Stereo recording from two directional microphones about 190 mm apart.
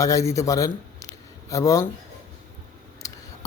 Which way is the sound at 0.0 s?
15° left (ahead or behind).